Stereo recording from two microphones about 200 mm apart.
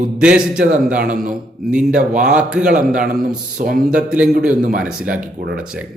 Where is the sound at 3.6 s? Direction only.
45° right (ahead or behind).